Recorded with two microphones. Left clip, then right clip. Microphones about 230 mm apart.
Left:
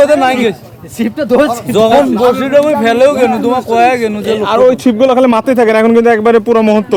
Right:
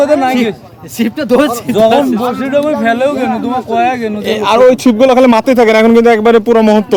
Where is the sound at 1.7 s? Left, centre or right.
Left.